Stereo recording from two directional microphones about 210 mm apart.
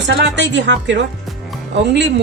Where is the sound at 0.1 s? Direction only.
55° right (ahead or behind).